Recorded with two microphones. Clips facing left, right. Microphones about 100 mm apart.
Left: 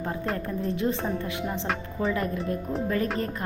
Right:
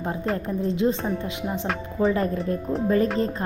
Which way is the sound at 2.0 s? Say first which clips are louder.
Right 6 dB; 30° right (ahead or behind).